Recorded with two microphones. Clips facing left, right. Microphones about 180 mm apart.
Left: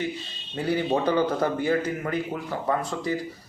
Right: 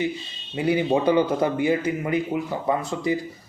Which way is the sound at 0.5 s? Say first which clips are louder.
Right 3 dB; 15° right (ahead or behind).